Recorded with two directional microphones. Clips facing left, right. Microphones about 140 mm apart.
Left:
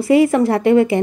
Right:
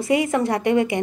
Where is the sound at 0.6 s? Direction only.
20° right (ahead or behind).